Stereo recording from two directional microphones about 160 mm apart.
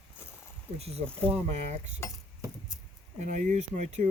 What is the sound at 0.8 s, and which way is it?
Speech, 40° right (ahead or behind).